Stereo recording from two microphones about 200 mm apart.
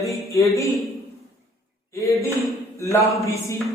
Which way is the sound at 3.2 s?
15° left (ahead or behind).